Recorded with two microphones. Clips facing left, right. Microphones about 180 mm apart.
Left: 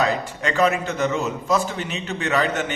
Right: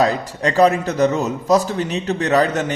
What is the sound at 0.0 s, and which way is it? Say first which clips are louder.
A man's voice: right 4 dB; 35° right (ahead or behind).